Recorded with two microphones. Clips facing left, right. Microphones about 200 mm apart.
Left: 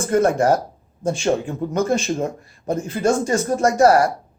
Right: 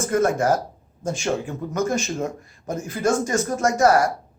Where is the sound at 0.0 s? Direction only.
30° left (ahead or behind).